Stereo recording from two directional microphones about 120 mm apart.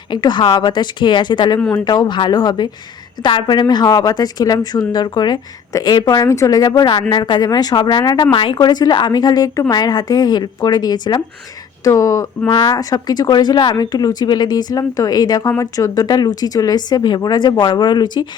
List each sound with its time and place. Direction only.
0.1 s speech: 40° left (ahead or behind)
8.3 s speech: 45° left (ahead or behind)
8.5 s speech: 35° left (ahead or behind)